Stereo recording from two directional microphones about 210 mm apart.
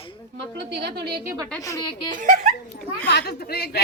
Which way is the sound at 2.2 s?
35° right (ahead or behind).